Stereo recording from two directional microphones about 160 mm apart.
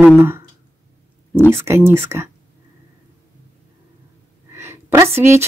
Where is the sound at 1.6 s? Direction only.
15° right (ahead or behind).